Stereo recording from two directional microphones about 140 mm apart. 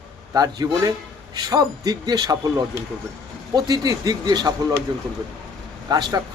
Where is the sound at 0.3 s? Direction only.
25° right (ahead or behind).